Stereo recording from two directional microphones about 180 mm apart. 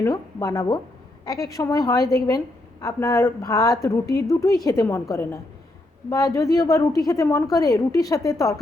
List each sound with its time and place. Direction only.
0.0 s a woman's voice: 20° left (ahead or behind)